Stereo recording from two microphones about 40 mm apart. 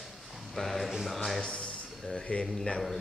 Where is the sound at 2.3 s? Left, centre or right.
Left.